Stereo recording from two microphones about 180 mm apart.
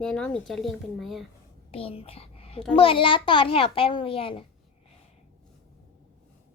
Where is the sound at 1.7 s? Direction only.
30° left (ahead or behind).